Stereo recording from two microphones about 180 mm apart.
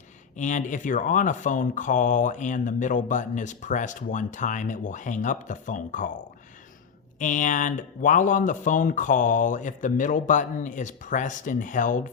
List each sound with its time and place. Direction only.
0.3 s speech: 45° left (ahead or behind)